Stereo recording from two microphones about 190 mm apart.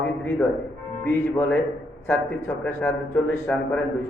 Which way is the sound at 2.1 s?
10° left (ahead or behind).